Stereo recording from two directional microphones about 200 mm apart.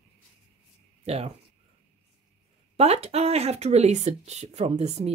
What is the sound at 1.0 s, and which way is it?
Speech, 30° right (ahead or behind).